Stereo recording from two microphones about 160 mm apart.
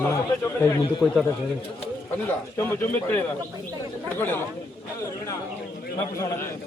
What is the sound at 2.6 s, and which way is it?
A man's voice, 15° left (ahead or behind).